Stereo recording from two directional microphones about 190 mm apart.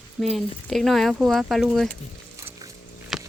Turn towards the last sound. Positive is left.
turn(degrees=0)  # may be behind; listen again after turning